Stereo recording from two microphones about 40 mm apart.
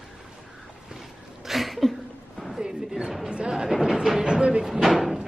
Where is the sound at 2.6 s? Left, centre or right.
Centre.